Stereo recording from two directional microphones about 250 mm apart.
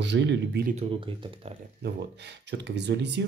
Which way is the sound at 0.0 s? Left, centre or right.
Right.